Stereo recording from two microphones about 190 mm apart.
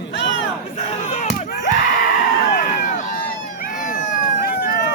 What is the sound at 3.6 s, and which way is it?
Cat, 45° left (ahead or behind).